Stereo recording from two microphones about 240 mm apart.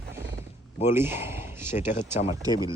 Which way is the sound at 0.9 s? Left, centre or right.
Centre.